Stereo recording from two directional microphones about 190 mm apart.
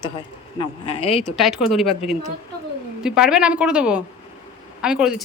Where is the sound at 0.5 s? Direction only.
30° left (ahead or behind).